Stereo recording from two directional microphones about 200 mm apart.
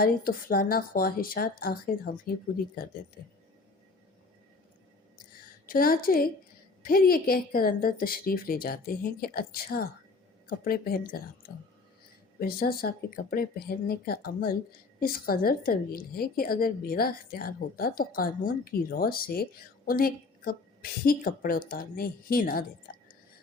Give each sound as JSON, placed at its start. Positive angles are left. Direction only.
{"t": 0.0, "sound": "a woman's voice", "side_deg": 45}
{"t": 5.6, "sound": "a woman's voice", "side_deg": 45}
{"t": 12.4, "sound": "a woman's voice", "side_deg": 50}